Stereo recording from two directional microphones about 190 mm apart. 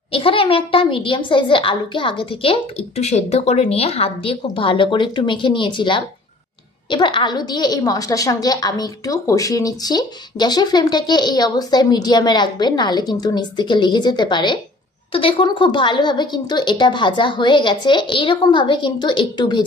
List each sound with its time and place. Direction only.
0.1 s a woman's voice: 30° left (ahead or behind)